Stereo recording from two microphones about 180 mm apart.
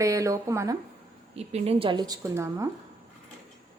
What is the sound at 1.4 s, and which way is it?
Speech, 35° right (ahead or behind).